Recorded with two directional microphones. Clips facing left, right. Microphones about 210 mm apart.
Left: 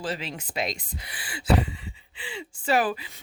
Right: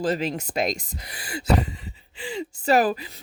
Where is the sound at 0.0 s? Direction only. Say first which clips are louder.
Right 8 dB; 40° right (ahead or behind).